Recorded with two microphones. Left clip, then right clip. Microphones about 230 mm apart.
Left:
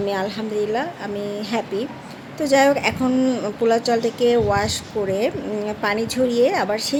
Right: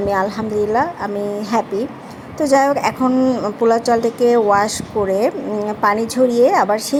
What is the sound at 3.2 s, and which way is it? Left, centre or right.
Speech, centre.